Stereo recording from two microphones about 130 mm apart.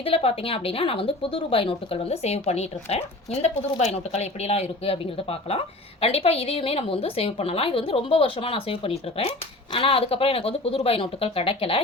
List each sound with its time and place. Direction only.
0.0 s a woman's voice: 50° left (ahead or behind)